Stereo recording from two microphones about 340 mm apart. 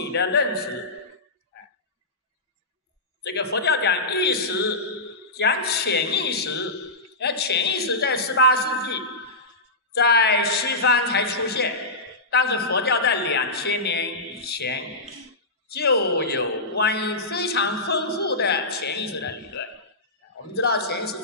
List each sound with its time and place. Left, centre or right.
0.1 s a woman's voice: left
3.3 s a woman's voice: left
9.9 s a woman's voice: left